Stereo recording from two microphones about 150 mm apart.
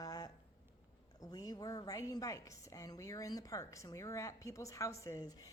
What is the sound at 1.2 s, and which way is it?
A woman's voice, 25° left (ahead or behind).